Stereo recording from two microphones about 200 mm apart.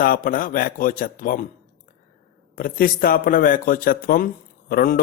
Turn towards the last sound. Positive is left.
turn(degrees=45)  # may be behind; listen again after turning